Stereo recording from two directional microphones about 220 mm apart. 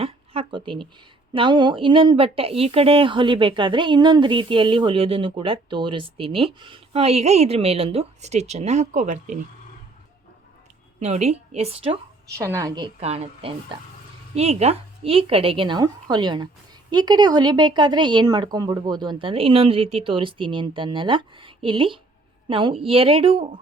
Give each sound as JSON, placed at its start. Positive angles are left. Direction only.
{"t": 0.0, "sound": "a sound", "side_deg": -25}
{"t": 1.3, "sound": "speech", "side_deg": -20}
{"t": 11.0, "sound": "speech", "side_deg": -30}
{"t": 12.4, "sound": "speech", "side_deg": -15}